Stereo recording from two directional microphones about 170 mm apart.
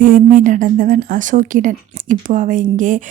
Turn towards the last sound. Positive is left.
turn(degrees=-50)  # may be behind; listen again after turning